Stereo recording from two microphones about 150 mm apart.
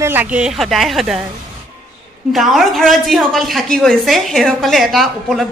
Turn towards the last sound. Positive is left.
turn(degrees=0)  # may be behind; listen again after turning